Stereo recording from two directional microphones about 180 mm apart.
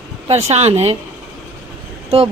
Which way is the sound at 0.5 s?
35° right (ahead or behind).